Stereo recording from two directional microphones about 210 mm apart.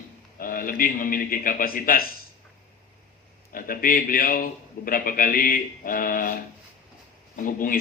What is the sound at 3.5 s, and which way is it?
A man's voice, 45° left (ahead or behind).